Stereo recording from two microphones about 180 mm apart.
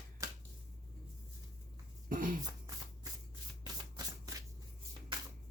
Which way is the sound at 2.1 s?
50° right (ahead or behind).